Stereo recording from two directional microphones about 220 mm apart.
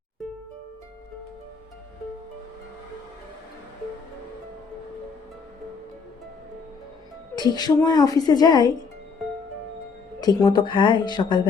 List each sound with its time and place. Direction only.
7.3 s a woman's voice: 20° left (ahead or behind)
10.2 s a woman's voice: 20° left (ahead or behind)